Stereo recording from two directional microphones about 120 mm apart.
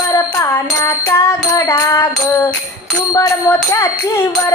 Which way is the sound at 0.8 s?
25° left (ahead or behind).